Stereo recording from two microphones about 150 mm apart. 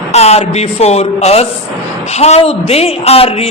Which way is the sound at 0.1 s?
45° left (ahead or behind).